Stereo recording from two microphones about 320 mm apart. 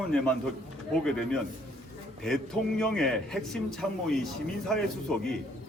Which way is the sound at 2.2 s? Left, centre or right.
Centre.